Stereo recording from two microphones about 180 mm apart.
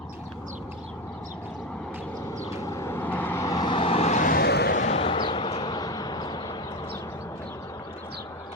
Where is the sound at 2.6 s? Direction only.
15° left (ahead or behind); by 4.7 s 65° left (ahead or behind).